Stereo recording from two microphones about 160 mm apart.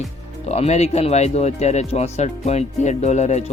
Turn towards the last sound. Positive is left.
turn(degrees=45)  # may be behind; listen again after turning